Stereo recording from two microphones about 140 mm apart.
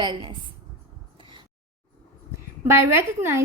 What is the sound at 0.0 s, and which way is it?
Speech, 35° right (ahead or behind).